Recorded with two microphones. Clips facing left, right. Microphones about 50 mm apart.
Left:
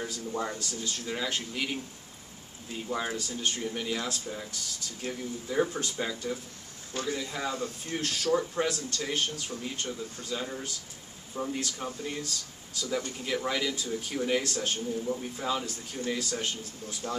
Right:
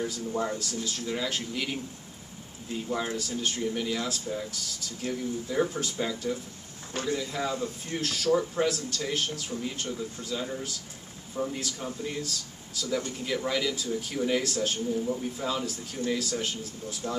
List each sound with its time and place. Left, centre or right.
0.0 s speech: centre
2.9 s speech: centre
17.0 s speech: centre